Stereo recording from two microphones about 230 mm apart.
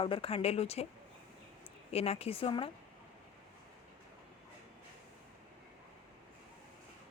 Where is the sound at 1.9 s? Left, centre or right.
Left.